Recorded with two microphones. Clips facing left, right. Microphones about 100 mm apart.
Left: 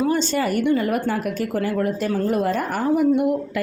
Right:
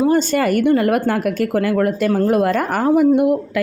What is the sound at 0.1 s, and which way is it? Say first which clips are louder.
Speech: right 5 dB; 55° right (ahead or behind).